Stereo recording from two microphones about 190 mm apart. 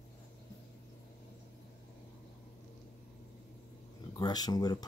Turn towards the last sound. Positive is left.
turn(degrees=20)  # may be behind; listen again after turning